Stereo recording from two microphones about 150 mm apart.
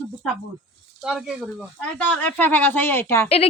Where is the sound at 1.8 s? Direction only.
10° left (ahead or behind).